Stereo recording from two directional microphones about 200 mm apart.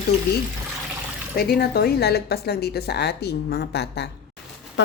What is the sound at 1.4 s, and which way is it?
Speech, 50° left (ahead or behind).